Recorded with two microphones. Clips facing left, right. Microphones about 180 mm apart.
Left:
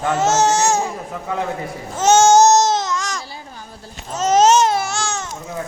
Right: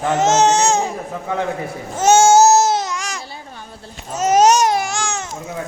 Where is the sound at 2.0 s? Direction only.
10° right (ahead or behind).